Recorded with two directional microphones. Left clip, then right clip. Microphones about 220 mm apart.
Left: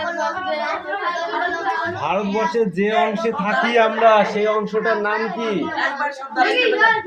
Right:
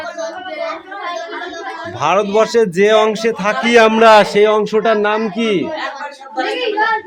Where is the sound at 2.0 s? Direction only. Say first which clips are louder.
Right 7 dB; 45° right (ahead or behind).